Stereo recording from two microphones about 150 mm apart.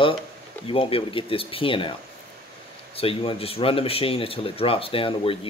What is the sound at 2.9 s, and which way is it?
Speech, 35° left (ahead or behind).